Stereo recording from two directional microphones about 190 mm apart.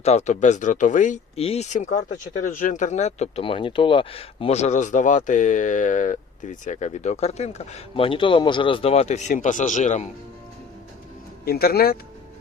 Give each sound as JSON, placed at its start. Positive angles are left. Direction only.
{"t": 0.0, "sound": "speech", "side_deg": 35}
{"t": 11.4, "sound": "speech", "side_deg": 55}